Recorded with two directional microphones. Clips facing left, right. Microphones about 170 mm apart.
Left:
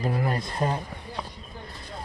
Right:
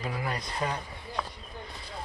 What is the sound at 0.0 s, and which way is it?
Speech, 45° left (ahead or behind).